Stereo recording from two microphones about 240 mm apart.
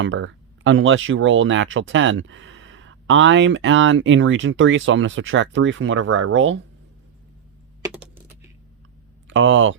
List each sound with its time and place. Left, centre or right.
0.0 s speech: right
7.9 s typing: centre
9.2 s speech: right